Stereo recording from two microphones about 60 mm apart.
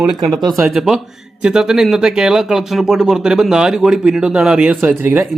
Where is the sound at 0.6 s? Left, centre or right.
Centre.